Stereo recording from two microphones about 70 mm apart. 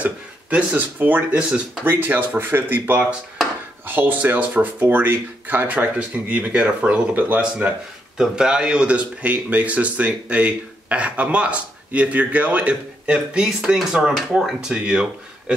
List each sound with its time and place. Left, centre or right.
0.0 s speech: centre
5.8 s speech: centre
8.2 s speech: centre